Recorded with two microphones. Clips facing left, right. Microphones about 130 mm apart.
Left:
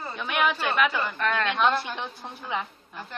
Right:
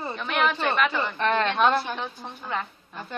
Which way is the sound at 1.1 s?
30° right (ahead or behind).